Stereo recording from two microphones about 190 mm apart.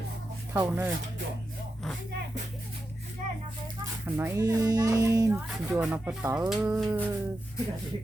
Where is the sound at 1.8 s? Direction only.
5° left (ahead or behind).